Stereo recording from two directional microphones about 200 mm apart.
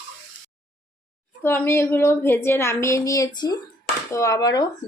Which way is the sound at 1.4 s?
10° left (ahead or behind).